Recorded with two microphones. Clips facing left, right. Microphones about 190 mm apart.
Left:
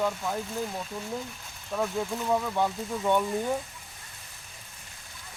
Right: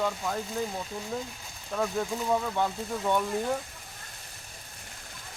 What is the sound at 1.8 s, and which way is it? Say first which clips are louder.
Speech: even; 5° left (ahead or behind).